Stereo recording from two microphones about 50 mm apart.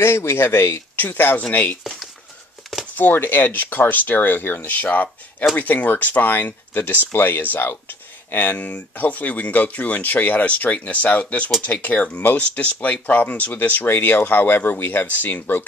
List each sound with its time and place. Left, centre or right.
0.0 s speech: left
0.9 s speech: left
3.0 s speech: left